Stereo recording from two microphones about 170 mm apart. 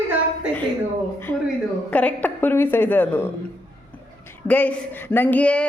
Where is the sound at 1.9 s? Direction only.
10° left (ahead or behind).